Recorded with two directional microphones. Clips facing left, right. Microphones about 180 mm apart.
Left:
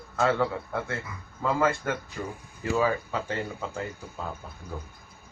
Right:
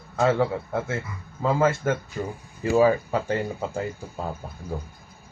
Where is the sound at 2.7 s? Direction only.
40° right (ahead or behind).